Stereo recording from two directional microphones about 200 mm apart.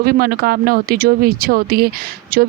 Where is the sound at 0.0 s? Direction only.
50° right (ahead or behind).